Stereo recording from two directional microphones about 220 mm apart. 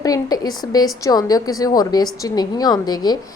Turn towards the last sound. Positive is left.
turn(degrees=20)  # may be behind; listen again after turning